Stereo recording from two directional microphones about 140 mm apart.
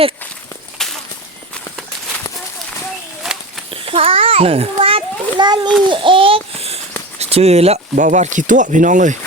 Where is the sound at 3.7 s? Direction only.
40° right (ahead or behind).